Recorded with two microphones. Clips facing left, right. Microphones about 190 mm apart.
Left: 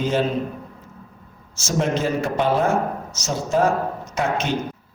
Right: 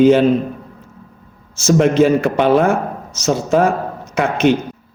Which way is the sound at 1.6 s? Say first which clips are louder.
Right 10 dB; 65° right (ahead or behind).